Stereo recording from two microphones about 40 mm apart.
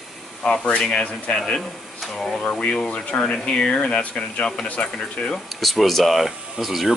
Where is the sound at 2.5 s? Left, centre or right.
Left.